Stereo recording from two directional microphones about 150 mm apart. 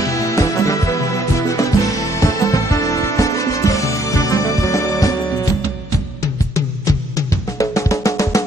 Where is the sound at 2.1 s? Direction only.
20° left (ahead or behind).